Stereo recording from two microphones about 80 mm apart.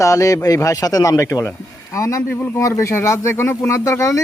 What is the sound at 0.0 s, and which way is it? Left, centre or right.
Speech, left.